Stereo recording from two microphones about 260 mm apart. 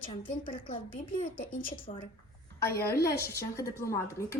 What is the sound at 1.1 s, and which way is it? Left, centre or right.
Speech, left.